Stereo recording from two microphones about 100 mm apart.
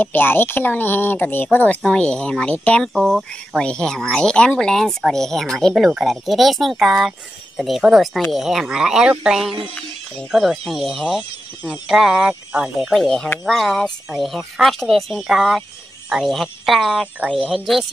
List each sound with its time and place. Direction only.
0.0 s speech: 20° left (ahead or behind)
2.9 s speech: 5° right (ahead or behind)
12.9 s speech: 5° left (ahead or behind)